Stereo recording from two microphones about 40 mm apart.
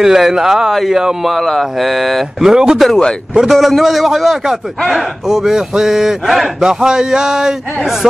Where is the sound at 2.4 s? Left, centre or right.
Centre.